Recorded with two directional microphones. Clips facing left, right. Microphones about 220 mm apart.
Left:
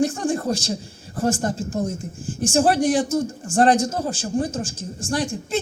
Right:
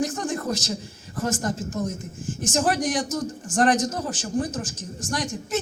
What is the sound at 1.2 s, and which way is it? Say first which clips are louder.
Speech: left 4 dB; 30° left (ahead or behind).